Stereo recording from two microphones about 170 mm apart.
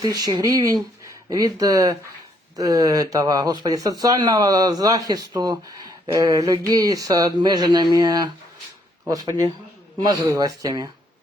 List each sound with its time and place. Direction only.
0.0 s speech: 25° right (ahead or behind)